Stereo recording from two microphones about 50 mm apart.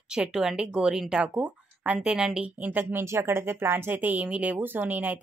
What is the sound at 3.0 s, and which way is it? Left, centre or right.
Speech, right.